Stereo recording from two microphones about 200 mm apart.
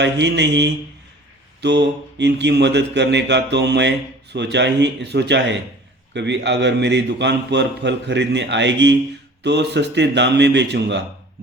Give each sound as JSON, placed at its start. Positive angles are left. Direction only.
{"t": 0.0, "sound": "mantra", "side_deg": -60}